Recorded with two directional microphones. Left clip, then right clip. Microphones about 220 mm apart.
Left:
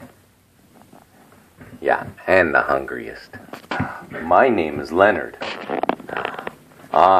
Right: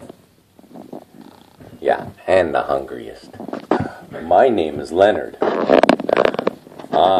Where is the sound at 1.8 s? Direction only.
50° left (ahead or behind).